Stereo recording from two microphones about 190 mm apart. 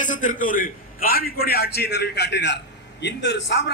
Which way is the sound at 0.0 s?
45° left (ahead or behind).